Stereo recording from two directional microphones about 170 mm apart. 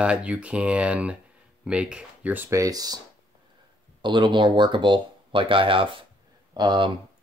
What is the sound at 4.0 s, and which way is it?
Speech, 25° right (ahead or behind).